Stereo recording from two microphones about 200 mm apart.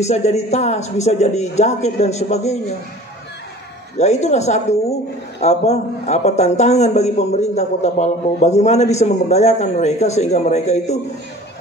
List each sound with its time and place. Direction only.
0.0 s a man's voice: 35° left (ahead or behind)
4.0 s a man's voice: 35° left (ahead or behind)